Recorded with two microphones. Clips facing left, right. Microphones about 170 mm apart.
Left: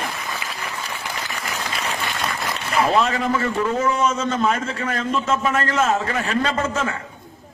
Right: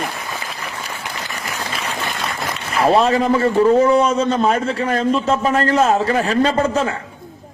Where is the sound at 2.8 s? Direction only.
35° right (ahead or behind).